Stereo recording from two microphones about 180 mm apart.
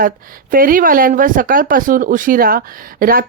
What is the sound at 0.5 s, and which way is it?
Speech, 50° right (ahead or behind).